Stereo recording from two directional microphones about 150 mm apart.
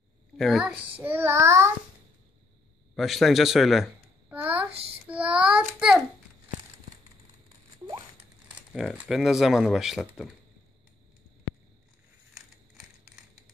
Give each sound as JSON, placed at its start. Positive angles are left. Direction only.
{"t": 0.4, "sound": "speech", "side_deg": 0}
{"t": 0.9, "sound": "child singing", "side_deg": -15}
{"t": 3.0, "sound": "speech", "side_deg": 0}
{"t": 4.3, "sound": "babbling", "side_deg": -10}
{"t": 5.0, "sound": "child singing", "side_deg": -10}
{"t": 8.5, "sound": "speech", "side_deg": -5}